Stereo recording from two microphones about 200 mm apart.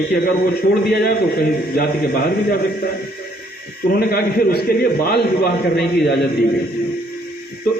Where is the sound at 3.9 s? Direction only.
50° left (ahead or behind).